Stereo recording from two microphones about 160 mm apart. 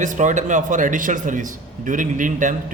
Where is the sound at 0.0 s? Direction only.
50° right (ahead or behind).